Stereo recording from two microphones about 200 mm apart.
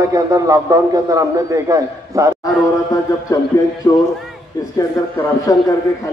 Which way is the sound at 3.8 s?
20° left (ahead or behind).